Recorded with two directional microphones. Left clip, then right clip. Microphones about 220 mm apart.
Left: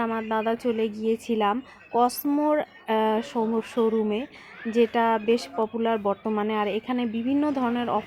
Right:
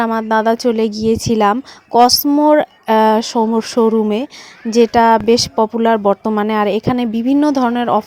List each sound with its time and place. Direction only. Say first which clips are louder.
0.0 s speech: right 12 dB; 40° right (ahead or behind)